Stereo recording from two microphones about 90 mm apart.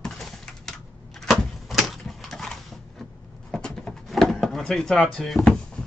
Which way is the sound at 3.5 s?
10° left (ahead or behind).